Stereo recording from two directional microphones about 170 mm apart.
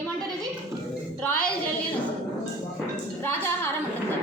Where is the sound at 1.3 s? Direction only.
5° left (ahead or behind).